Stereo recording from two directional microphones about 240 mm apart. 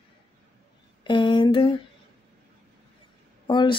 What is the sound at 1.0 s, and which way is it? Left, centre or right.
Speech, centre.